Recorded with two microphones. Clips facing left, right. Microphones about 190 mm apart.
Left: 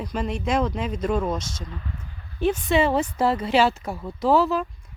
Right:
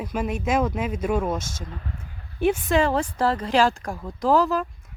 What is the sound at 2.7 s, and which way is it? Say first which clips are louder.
Speech: left 1 dB; 5° left (ahead or behind).